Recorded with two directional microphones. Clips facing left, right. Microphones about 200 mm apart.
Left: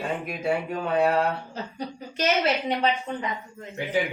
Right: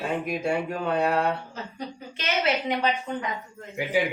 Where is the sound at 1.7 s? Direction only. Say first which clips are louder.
Left 3 dB; 40° left (ahead or behind).